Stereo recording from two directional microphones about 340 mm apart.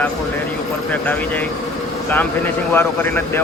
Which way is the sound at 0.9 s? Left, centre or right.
Centre.